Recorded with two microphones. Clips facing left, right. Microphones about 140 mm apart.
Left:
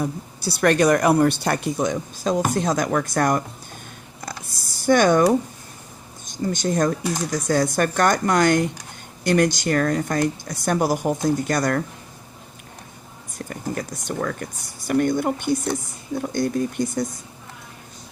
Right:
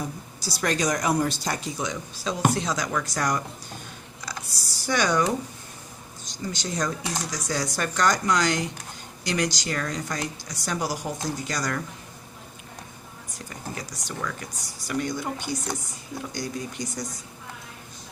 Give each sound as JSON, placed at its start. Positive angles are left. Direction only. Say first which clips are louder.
{"t": 0.0, "sound": "speech", "louder": "left 7 dB", "side_deg": 60}
{"t": 4.2, "sound": "a sound", "louder": "left 3 dB", "side_deg": 50}
{"t": 6.2, "sound": "speech", "louder": "left 9 dB", "side_deg": 50}
{"t": 13.5, "sound": "speech", "louder": "left 8 dB", "side_deg": 55}